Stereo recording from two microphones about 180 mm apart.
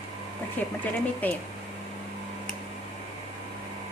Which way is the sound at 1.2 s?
10° left (ahead or behind).